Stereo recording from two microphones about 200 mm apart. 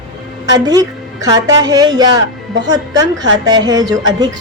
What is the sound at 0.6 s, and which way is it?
A woman's voice, 20° right (ahead or behind).